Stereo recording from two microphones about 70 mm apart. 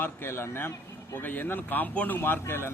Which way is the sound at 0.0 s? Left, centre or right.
Left.